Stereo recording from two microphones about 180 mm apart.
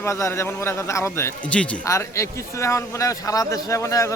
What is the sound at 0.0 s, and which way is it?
A man's voice, 15° left (ahead or behind).